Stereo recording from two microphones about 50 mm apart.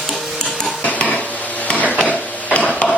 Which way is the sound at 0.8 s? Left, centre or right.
Left.